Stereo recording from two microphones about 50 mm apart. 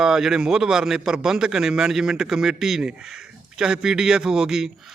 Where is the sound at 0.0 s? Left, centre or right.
Centre.